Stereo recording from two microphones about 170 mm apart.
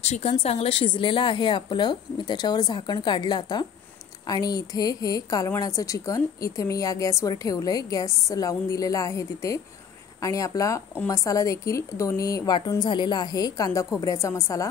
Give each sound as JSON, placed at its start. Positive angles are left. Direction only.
{"t": 0.0, "sound": "a woman's voice", "side_deg": 40}